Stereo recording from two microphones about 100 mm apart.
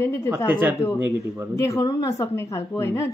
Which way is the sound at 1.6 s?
35° left (ahead or behind).